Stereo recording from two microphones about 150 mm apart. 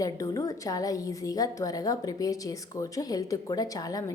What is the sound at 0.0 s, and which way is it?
A woman's voice, 25° left (ahead or behind).